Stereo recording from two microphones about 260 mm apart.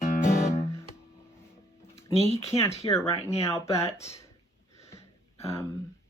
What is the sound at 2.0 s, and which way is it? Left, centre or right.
Speech, centre.